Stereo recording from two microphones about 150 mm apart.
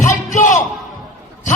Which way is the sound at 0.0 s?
60° left (ahead or behind).